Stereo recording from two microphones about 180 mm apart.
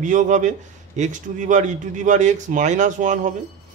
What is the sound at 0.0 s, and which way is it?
A man's voice, 45° right (ahead or behind).